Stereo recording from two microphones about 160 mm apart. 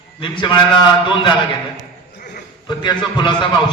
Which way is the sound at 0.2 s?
30° left (ahead or behind).